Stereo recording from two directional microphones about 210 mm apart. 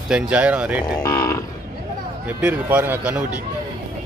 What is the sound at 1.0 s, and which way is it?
Cattle, 15° left (ahead or behind).